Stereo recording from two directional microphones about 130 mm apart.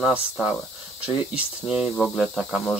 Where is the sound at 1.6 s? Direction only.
5° right (ahead or behind).